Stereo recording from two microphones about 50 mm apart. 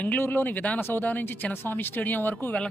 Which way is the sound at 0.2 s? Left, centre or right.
Left.